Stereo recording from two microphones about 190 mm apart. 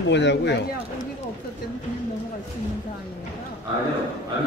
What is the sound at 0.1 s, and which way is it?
Speech, 65° left (ahead or behind).